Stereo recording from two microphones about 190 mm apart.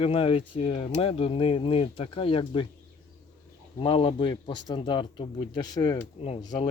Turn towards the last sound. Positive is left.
turn(degrees=25)  # may be behind; listen again after turning